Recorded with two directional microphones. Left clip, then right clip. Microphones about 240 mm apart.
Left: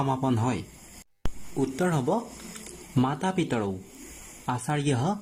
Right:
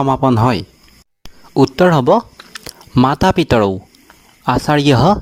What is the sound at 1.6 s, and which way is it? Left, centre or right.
Speech, right.